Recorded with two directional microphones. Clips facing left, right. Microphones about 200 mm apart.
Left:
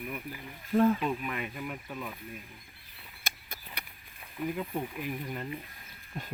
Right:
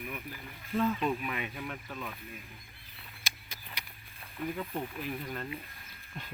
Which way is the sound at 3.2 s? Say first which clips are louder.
Left 3 dB; 55° left (ahead or behind).